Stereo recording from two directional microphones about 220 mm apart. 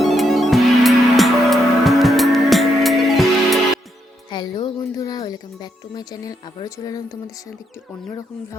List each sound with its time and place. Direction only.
0.0 s music: centre (ahead or behind)
4.3 s music: 20° left (ahead or behind)